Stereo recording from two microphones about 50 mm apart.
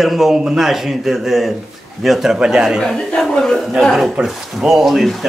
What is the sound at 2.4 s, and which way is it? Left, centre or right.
Speech, centre.